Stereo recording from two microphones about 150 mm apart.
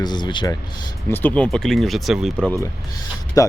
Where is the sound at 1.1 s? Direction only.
15° left (ahead or behind).